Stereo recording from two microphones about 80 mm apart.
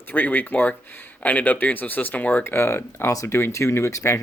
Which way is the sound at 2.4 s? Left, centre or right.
Left.